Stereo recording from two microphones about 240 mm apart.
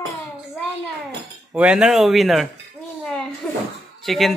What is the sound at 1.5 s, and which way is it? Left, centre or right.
Speech, centre.